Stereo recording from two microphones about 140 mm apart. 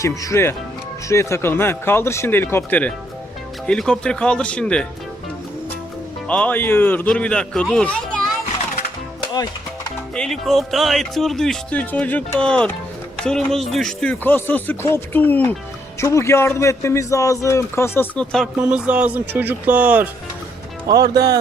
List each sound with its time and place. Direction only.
0.0 s a man's voice: 25° left (ahead or behind); by 4.9 s 5° left (ahead or behind)
6.2 s speech: 10° left (ahead or behind)
9.3 s music: 30° left (ahead or behind)
10.2 s a man's voice: centre (ahead or behind)
18.5 s speech: 10° right (ahead or behind)
20.8 s speech: 25° right (ahead or behind)